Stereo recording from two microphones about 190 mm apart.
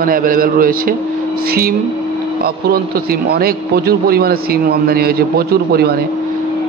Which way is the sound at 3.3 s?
55° right (ahead or behind).